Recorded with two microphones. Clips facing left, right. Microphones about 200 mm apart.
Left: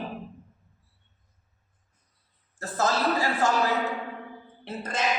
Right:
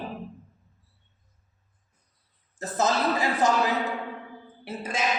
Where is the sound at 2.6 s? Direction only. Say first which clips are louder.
Right 1 dB; 20° right (ahead or behind).